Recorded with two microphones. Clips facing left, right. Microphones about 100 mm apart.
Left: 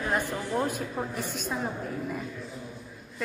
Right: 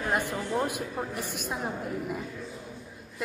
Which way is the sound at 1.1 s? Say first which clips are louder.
Left 1 dB; 60° right (ahead or behind).